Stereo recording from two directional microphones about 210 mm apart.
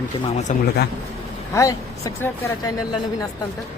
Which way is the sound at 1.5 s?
15° left (ahead or behind).